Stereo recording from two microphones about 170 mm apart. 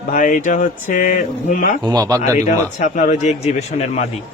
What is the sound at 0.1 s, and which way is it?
Speech, 50° left (ahead or behind).